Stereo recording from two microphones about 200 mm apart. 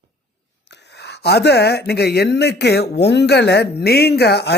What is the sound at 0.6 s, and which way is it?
Speech, 60° left (ahead or behind).